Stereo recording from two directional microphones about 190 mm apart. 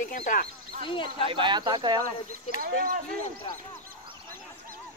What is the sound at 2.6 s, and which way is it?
Speech, 45° right (ahead or behind).